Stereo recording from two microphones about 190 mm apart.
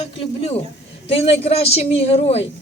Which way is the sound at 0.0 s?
30° left (ahead or behind).